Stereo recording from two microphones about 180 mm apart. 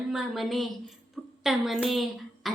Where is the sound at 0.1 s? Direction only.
Centre (ahead or behind).